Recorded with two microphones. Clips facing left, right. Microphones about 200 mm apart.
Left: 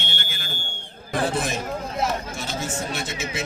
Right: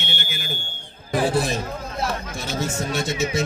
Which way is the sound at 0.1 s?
15° right (ahead or behind).